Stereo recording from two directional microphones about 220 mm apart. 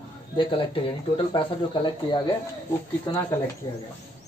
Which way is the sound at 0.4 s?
25° left (ahead or behind).